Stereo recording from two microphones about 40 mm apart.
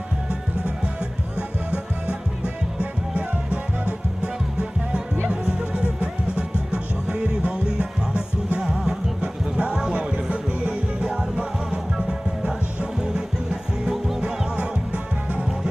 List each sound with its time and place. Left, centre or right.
1.4 s music: left
5.3 s music: right
9.2 s music: right
14.5 s music: right